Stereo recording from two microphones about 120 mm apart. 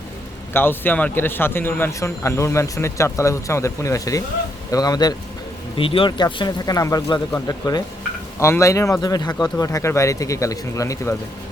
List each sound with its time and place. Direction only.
0.5 s a man's voice: 15° left (ahead or behind); by 5.1 s 35° left (ahead or behind)
5.7 s a man's voice: 45° left (ahead or behind); by 11.1 s 25° left (ahead or behind)